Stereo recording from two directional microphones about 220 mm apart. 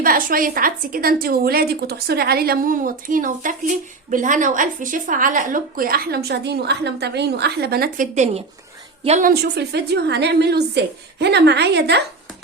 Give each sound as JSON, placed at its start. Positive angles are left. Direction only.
{"t": 0.0, "sound": "a woman's voice", "side_deg": -40}
{"t": 9.3, "sound": "a woman's voice", "side_deg": -45}